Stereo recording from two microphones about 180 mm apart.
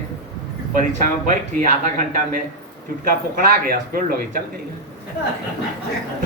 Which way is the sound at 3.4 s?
55° right (ahead or behind).